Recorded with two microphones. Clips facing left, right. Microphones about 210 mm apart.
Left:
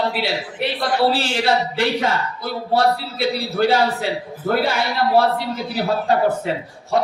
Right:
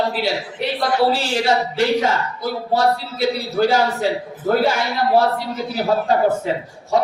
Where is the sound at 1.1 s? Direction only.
60° left (ahead or behind).